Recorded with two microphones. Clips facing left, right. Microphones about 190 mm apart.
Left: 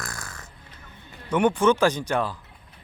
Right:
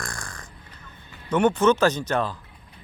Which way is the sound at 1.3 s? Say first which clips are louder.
Right 1 dB; 10° left (ahead or behind).